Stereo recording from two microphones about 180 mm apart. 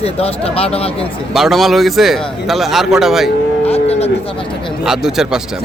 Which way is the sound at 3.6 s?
35° left (ahead or behind).